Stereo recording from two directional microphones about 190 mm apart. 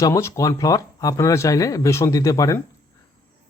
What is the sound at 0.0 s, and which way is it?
Speech, 15° left (ahead or behind).